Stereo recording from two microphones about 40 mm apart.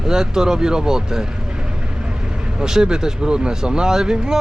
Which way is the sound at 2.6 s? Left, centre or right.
Centre.